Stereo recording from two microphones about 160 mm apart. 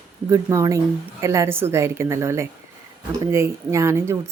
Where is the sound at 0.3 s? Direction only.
20° right (ahead or behind).